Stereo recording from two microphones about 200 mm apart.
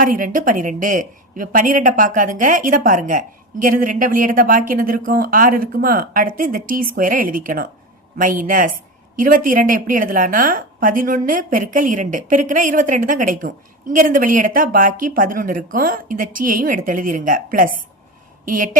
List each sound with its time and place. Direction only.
0.0 s a woman's voice: 45° right (ahead or behind)